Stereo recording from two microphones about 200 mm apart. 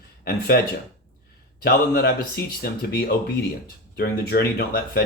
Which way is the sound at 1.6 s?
50° left (ahead or behind).